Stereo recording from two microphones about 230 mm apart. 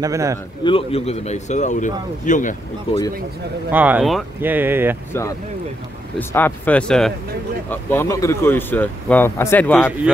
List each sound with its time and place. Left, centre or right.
0.0 s speech: centre
0.7 s a man's voice: left
3.7 s speech: centre
6.1 s speech: centre